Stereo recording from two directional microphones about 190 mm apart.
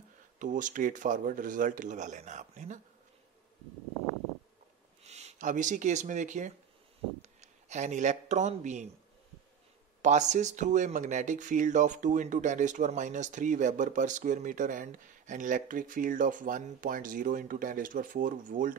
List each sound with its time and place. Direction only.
0.4 s speech: 45° right (ahead or behind)
5.0 s speech: 35° right (ahead or behind)
10.0 s speech: 40° right (ahead or behind)